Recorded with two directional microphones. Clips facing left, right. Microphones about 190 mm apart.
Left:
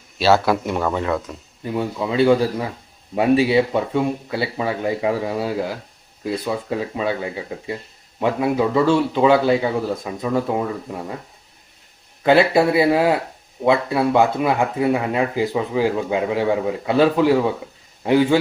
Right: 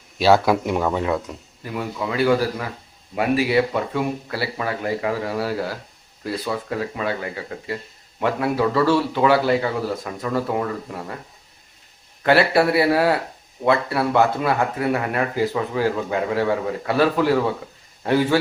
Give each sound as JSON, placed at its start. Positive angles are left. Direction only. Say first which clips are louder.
{"t": 0.4, "sound": "speech", "louder": "even", "side_deg": -5}
{"t": 1.6, "sound": "speech", "louder": "left 4 dB", "side_deg": 25}
{"t": 12.2, "sound": "a man's voice", "louder": "left 2 dB", "side_deg": 15}